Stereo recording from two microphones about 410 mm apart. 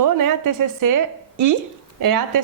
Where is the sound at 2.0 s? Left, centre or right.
Right.